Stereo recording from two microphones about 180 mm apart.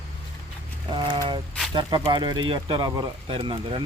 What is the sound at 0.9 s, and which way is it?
Speech, 25° right (ahead or behind).